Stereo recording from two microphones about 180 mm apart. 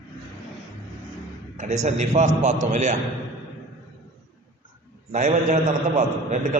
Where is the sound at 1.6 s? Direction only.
40° right (ahead or behind).